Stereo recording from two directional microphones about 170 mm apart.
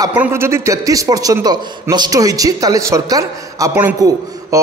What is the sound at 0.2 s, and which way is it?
A man's voice, 15° right (ahead or behind).